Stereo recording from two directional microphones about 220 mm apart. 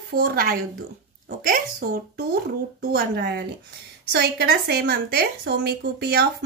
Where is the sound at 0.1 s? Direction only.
45° right (ahead or behind).